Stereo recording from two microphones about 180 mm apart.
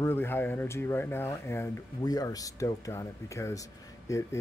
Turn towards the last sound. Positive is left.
turn(degrees=15)  # may be behind; listen again after turning